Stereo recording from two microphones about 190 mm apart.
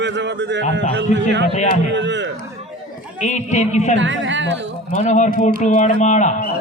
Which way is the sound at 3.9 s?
75° right (ahead or behind).